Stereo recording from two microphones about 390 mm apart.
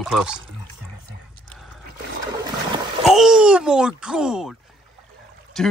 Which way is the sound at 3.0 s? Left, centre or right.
Centre.